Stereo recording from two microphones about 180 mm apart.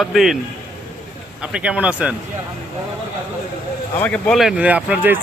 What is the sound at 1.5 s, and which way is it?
Speech, 5° right (ahead or behind).